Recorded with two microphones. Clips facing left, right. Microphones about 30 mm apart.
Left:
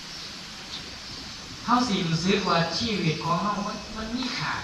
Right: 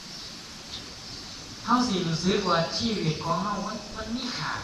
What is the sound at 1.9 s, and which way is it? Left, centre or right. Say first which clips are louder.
Speech: left 1 dB; left.